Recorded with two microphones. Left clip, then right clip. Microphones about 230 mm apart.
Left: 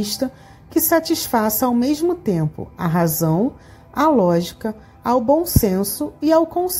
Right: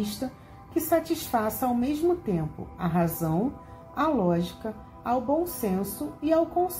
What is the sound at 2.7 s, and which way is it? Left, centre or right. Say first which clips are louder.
A woman's voice: left 7 dB; left.